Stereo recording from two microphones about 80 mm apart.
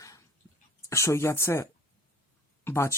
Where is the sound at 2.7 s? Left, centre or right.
Left.